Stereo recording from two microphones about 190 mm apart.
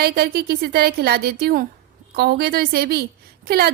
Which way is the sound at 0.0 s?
55° right (ahead or behind).